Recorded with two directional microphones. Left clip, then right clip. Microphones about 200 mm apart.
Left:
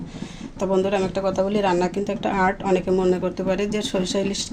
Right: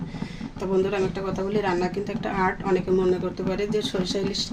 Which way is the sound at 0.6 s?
45° left (ahead or behind).